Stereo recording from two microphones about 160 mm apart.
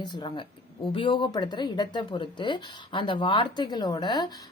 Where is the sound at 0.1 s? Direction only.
30° left (ahead or behind).